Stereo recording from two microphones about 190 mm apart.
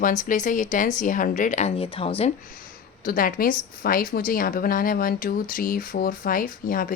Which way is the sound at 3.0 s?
50° left (ahead or behind).